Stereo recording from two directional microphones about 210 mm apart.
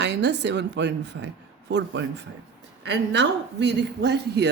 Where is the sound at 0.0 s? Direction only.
55° right (ahead or behind).